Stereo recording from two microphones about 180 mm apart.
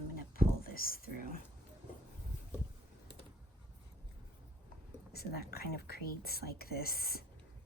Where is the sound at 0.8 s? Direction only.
55° left (ahead or behind).